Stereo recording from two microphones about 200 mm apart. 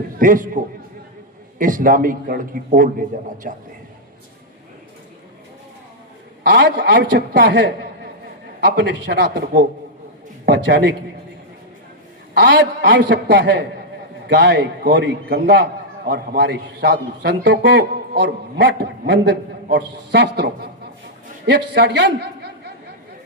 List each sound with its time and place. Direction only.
0.2 s a man's voice: 40° right (ahead or behind)
6.4 s a man's voice: 60° right (ahead or behind)
10.4 s a man's voice: 55° right (ahead or behind)
12.3 s a man's voice: 60° right (ahead or behind)